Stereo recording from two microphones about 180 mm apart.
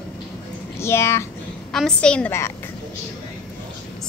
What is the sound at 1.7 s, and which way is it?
Speech, 5° left (ahead or behind).